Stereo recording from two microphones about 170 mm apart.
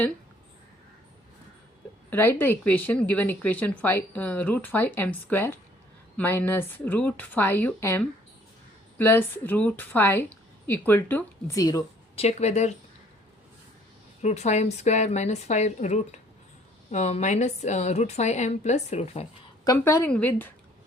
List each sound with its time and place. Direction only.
2.0 s a woman's voice: 10° left (ahead or behind)
12.1 s speech: 40° left (ahead or behind)
14.2 s a woman's voice: 40° left (ahead or behind)
19.6 s a woman's voice: 15° left (ahead or behind)